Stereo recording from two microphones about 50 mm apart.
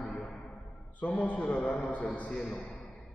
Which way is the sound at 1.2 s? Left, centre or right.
Left.